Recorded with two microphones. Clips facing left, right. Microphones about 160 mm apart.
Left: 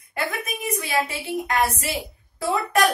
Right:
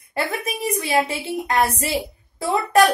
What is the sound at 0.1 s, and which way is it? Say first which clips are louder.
A woman's voice: right 3 dB; 30° right (ahead or behind).